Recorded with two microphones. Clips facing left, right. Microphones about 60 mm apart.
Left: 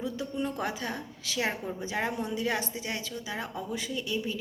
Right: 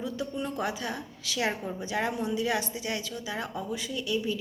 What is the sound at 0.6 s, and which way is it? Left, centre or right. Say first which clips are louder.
A woman's voice: right 1 dB; left.